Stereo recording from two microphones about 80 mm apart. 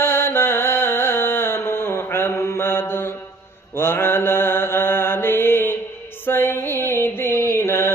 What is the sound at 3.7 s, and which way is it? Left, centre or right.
Mantra, left.